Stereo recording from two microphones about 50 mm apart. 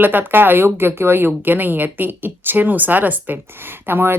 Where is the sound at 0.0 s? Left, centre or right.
Right.